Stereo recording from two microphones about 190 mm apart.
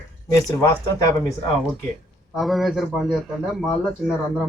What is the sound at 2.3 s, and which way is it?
Speech, centre (ahead or behind).